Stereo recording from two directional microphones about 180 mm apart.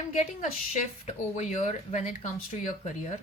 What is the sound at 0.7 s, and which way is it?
Speech, 40° left (ahead or behind).